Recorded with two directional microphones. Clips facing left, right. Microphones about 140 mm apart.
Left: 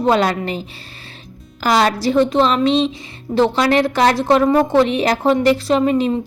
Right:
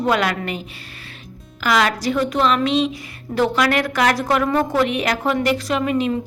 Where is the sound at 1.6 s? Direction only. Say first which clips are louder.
Left 3 dB; 35° left (ahead or behind).